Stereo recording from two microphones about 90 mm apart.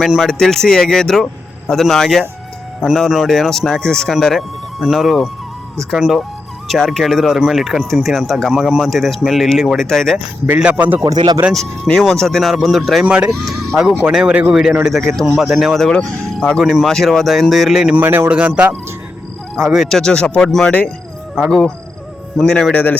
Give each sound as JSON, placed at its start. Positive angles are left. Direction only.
{"t": 0.0, "sound": "speech", "side_deg": 0}
{"t": 10.6, "sound": "speech", "side_deg": -15}
{"t": 11.0, "sound": "speech", "side_deg": -50}
{"t": 11.5, "sound": "speech", "side_deg": 5}
{"t": 17.9, "sound": "speech", "side_deg": -25}
{"t": 19.5, "sound": "speech", "side_deg": 0}
{"t": 22.4, "sound": "speech", "side_deg": 5}
{"t": 22.7, "sound": "speech", "side_deg": 20}